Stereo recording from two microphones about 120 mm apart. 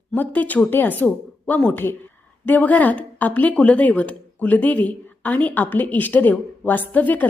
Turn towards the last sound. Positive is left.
turn(degrees=15)  # may be behind; listen again after turning